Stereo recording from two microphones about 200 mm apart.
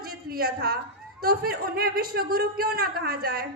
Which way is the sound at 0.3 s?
50° right (ahead or behind).